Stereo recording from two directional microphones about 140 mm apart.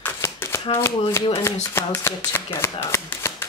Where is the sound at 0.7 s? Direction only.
15° left (ahead or behind).